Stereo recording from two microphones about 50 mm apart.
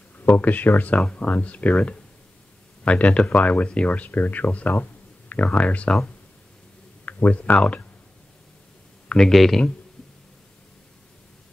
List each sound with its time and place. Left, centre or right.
0.2 s speech: left
7.1 s speech: left
9.3 s speech: centre